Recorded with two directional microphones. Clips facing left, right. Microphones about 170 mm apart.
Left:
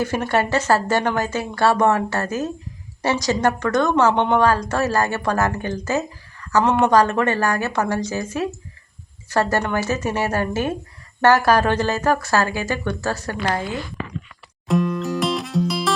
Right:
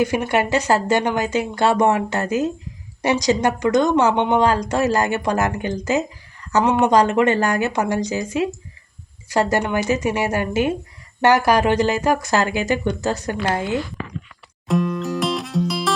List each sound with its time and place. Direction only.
0.0 s speech: 15° right (ahead or behind)
14.7 s music: centre (ahead or behind)